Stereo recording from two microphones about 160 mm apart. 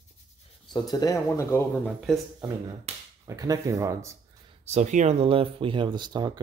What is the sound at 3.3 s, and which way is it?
Speech, 20° right (ahead or behind).